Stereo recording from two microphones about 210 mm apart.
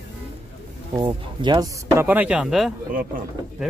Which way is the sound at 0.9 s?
20° right (ahead or behind).